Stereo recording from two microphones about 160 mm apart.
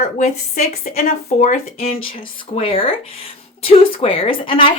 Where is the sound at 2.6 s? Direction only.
35° left (ahead or behind).